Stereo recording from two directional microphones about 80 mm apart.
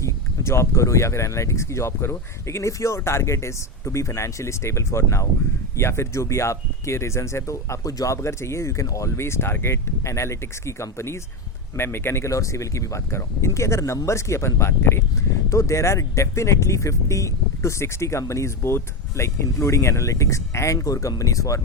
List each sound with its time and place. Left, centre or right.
0.0 s speech: left